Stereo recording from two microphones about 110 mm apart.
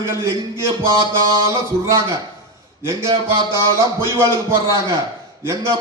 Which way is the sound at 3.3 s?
25° right (ahead or behind).